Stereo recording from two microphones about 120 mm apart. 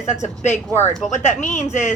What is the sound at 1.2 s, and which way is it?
Speech, 80° left.